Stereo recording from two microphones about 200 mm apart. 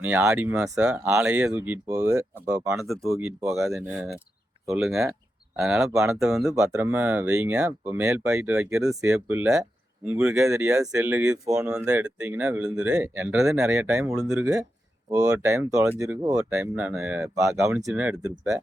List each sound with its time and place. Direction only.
0.0 s speech: 10° right (ahead or behind)
0.6 s speech: 5° right (ahead or behind); by 2.7 s 20° right (ahead or behind)
2.7 s speech: centre (ahead or behind)
3.4 s speech: 15° right (ahead or behind)
4.7 s speech: centre (ahead or behind)
6.4 s speech: 15° right (ahead or behind)
10.3 s speech: 15° right (ahead or behind)
10.6 s speech: 5° right (ahead or behind)
15.1 s speech: 15° right (ahead or behind)
17.3 s speech: 15° right (ahead or behind)